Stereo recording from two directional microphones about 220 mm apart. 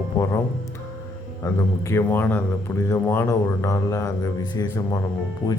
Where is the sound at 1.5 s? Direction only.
15° left (ahead or behind).